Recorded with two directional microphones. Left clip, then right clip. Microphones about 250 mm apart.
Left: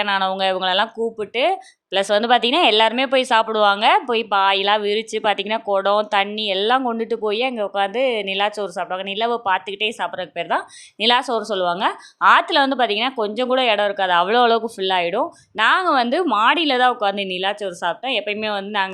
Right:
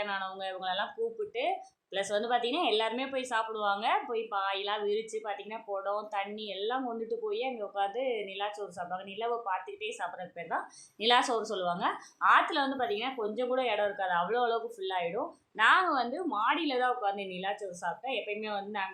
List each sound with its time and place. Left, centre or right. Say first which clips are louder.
0.0 s speech: left 16 dB; left